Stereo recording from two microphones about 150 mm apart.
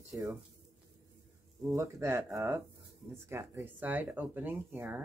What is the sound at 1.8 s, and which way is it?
Speech, 20° right (ahead or behind).